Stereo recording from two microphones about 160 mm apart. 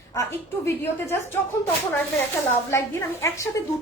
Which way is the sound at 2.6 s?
15° left (ahead or behind).